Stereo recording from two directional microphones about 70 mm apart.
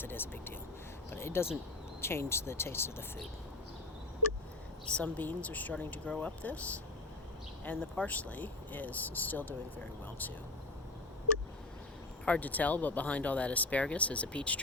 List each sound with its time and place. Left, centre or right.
0.0 s speech: left
4.9 s speech: left
7.6 s speech: left
12.2 s speech: left